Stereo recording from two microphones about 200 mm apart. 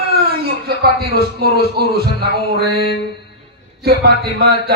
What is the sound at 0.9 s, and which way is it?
Music, 50° right (ahead or behind).